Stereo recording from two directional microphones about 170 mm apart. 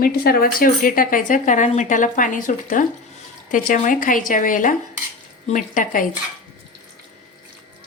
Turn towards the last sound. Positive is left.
turn(degrees=50)  # may be behind; listen again after turning